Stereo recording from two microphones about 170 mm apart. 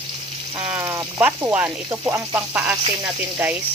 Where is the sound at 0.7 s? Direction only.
15° right (ahead or behind).